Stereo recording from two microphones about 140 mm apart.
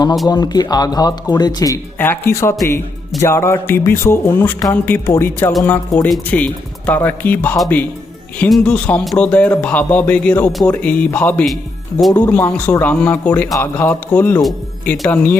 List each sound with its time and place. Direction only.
0.3 s music: 30° left (ahead or behind)
2.0 s speech: 15° left (ahead or behind)
3.2 s music: 20° left (ahead or behind)
5.6 s speech: 15° left (ahead or behind)